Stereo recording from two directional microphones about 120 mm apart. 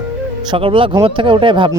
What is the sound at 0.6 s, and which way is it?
Speech, 45° right (ahead or behind).